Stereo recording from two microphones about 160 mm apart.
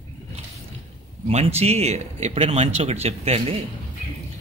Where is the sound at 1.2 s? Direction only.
40° right (ahead or behind).